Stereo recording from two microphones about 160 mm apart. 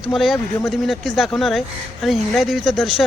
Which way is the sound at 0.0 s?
Centre (ahead or behind).